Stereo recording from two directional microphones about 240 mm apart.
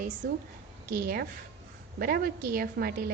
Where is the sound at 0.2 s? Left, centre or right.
Right.